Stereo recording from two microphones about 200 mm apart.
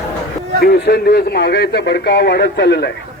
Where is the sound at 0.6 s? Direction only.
55° left (ahead or behind).